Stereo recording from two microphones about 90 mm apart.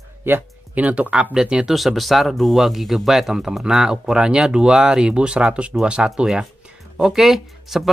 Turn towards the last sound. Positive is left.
turn(degrees=-5)  # may be behind; listen again after turning